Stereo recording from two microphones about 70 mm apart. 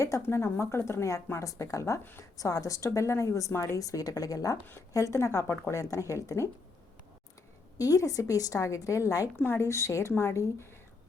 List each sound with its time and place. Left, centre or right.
0.0 s speech: left
3.8 s a woman's voice: left
4.9 s speech: left
7.8 s speech: left
9.4 s a woman's voice: left